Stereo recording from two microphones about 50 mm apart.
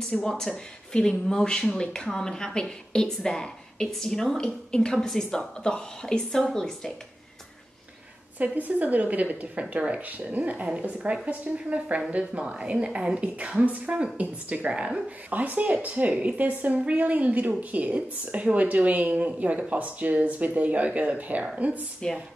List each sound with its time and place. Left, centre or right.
0.1 s speech: centre
8.4 s a woman's voice: right
15.2 s a woman's voice: right